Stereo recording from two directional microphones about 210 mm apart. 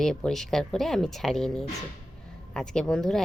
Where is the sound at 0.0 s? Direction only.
Centre (ahead or behind).